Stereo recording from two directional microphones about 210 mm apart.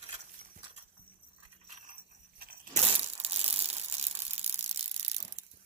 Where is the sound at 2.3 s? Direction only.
40° right (ahead or behind).